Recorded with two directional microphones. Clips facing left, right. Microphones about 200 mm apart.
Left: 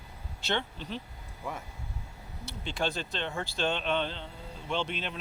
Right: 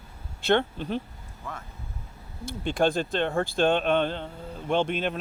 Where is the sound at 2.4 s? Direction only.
50° right (ahead or behind).